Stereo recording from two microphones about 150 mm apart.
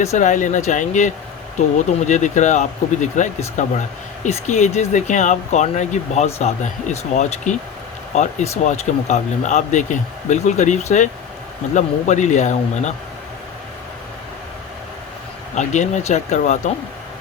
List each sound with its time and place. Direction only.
0.0 s speech: 50° left (ahead or behind)
15.5 s speech: 55° left (ahead or behind)